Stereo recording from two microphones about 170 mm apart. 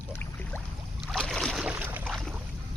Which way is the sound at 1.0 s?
Centre (ahead or behind).